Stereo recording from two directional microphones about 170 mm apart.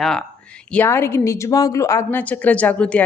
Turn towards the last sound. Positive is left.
turn(degrees=5)  # may be behind; listen again after turning